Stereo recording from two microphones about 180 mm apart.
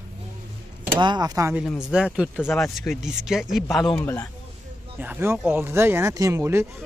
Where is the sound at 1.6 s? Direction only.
5° right (ahead or behind).